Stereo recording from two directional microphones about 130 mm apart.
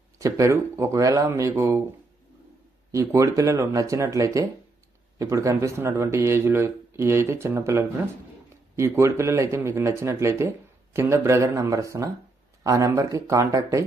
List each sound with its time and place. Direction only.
0.2 s speech: 25° right (ahead or behind)
2.9 s speech: 25° right (ahead or behind)